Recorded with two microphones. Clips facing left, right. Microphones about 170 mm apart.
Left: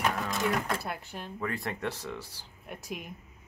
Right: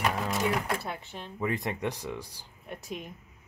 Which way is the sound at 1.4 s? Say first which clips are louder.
Right 3 dB; 15° right (ahead or behind).